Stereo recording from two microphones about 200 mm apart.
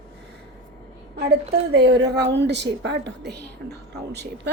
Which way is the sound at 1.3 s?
55° right (ahead or behind).